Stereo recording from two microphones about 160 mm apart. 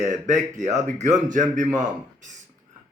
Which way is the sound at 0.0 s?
50° right (ahead or behind).